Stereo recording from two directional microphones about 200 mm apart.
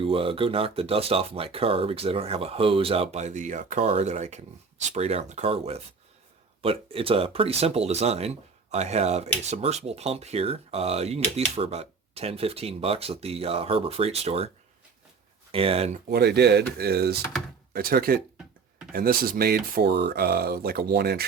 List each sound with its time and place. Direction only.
0.0 s speech: 30° right (ahead or behind)
15.5 s speech: 30° right (ahead or behind)
16.0 s speech: 55° right (ahead or behind)